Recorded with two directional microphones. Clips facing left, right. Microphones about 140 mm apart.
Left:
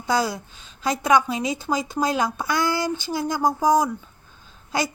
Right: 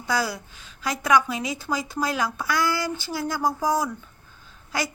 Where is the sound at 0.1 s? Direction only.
25° left (ahead or behind).